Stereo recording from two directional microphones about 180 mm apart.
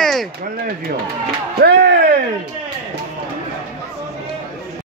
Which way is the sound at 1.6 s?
65° right (ahead or behind).